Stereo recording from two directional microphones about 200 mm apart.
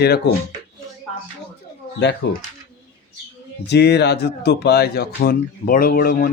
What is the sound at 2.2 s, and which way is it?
Speech, 65° left (ahead or behind).